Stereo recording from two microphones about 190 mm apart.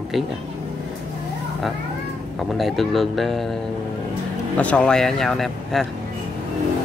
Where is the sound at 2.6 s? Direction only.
Centre (ahead or behind).